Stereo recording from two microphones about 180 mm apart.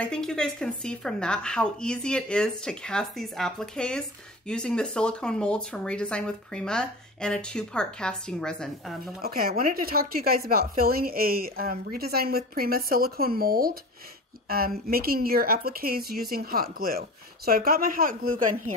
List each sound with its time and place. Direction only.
0.0 s speech: 5° left (ahead or behind)
9.2 s a woman's voice: 55° right (ahead or behind)